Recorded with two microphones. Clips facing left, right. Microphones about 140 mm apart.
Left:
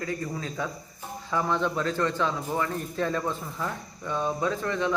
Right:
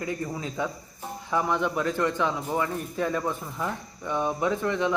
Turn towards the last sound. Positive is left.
turn(degrees=-15)  # may be behind; listen again after turning